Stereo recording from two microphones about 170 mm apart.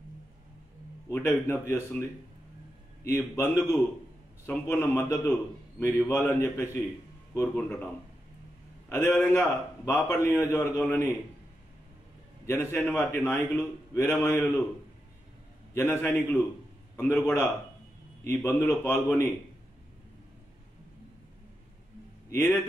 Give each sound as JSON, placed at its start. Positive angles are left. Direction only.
{"t": 1.0, "sound": "a man's voice", "side_deg": 15}
{"t": 12.4, "sound": "a man's voice", "side_deg": 10}
{"t": 15.7, "sound": "a man's voice", "side_deg": 15}
{"t": 22.3, "sound": "a man's voice", "side_deg": 15}